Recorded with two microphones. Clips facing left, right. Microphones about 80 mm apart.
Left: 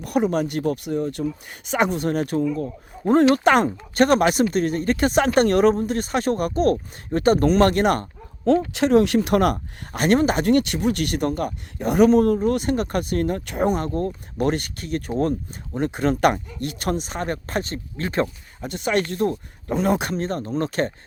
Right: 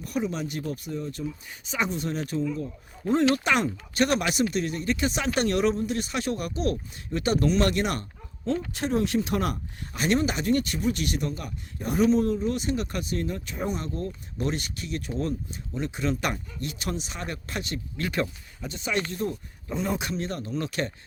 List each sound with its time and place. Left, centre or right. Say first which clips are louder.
0.0 s speech: left 8 dB; left
8.4 s speech: left 10 dB; left
10.4 s speech: left 6 dB; left
11.8 s speech: left 7 dB; left
18.6 s speech: left 7 dB; left